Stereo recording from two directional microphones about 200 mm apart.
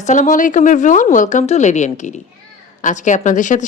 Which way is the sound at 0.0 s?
40° left (ahead or behind).